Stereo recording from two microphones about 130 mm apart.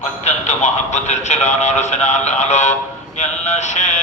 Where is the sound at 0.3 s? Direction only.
60° left (ahead or behind).